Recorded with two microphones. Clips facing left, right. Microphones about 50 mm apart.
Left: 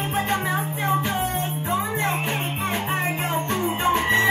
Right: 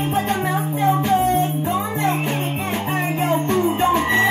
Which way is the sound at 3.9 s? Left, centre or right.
Right.